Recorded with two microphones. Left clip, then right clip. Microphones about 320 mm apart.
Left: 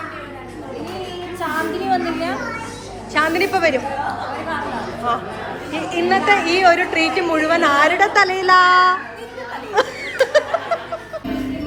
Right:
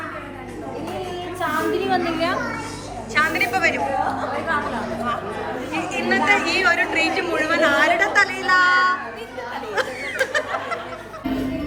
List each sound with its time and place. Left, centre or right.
1.9 s a woman's voice: centre
5.9 s a woman's voice: centre
9.7 s snicker: centre